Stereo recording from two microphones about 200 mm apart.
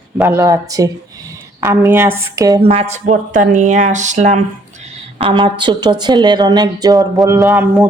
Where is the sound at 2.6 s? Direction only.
30° right (ahead or behind).